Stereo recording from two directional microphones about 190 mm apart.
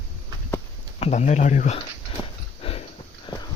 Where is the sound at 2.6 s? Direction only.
30° left (ahead or behind).